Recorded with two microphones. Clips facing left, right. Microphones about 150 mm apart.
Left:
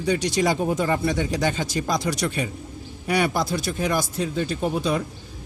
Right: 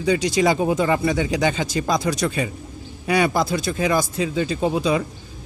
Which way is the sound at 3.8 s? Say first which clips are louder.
Right 4 dB; 90° right.